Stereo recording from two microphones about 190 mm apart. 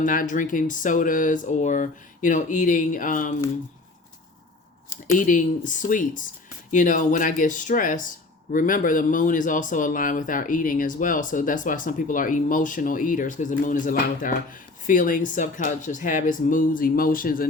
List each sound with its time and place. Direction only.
0.0 s speech: 45° left (ahead or behind)
5.1 s speech: 45° left (ahead or behind)